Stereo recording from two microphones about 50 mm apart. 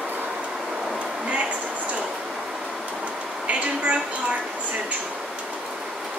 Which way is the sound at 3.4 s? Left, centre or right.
Right.